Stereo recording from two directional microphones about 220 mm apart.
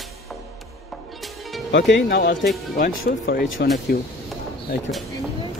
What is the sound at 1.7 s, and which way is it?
Speech, 55° left (ahead or behind).